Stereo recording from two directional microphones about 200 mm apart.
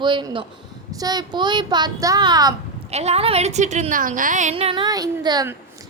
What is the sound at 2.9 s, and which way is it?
A woman's voice, 30° right (ahead or behind).